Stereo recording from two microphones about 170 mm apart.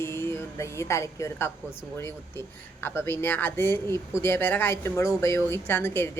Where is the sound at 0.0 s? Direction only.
15° left (ahead or behind).